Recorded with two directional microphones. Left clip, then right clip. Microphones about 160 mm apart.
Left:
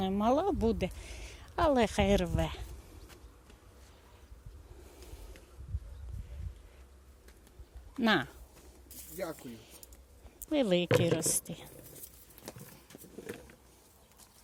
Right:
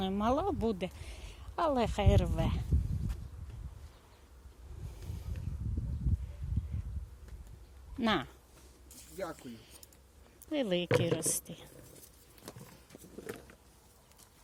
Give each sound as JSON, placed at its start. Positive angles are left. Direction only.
{"t": 0.0, "sound": "speech", "side_deg": 10}
{"t": 4.9, "sound": "vehicle", "side_deg": 10}
{"t": 6.1, "sound": "a sound", "side_deg": 10}
{"t": 7.9, "sound": "speech", "side_deg": 15}
{"t": 13.1, "sound": "vehicle", "side_deg": -30}